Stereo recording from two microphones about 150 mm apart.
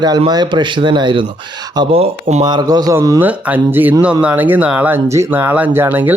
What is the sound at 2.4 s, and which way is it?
Speech, 30° right (ahead or behind).